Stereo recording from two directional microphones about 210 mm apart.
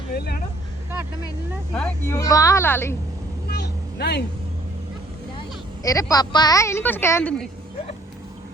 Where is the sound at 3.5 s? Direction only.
50° left (ahead or behind).